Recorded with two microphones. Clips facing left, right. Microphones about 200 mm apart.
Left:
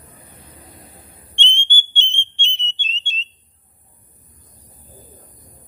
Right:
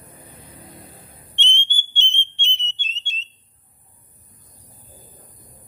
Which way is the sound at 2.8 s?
30° left (ahead or behind).